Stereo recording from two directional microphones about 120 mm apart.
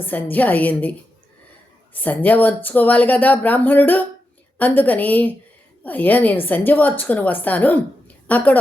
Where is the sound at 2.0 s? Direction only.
15° left (ahead or behind).